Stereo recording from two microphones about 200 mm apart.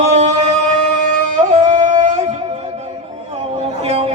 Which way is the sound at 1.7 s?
35° right (ahead or behind).